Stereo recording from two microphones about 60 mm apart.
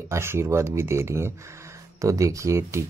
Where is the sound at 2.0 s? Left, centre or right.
Right.